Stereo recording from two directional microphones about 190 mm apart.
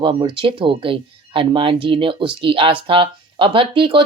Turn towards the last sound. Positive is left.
turn(degrees=-25)  # may be behind; listen again after turning